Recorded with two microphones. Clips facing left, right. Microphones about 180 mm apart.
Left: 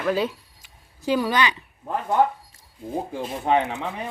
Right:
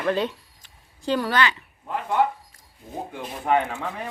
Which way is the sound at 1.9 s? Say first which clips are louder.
Left 2 dB; 40° left (ahead or behind).